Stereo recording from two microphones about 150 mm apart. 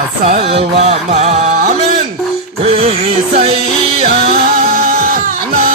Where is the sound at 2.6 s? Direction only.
45° right (ahead or behind).